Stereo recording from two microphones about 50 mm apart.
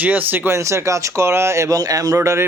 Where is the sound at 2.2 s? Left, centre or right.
Right.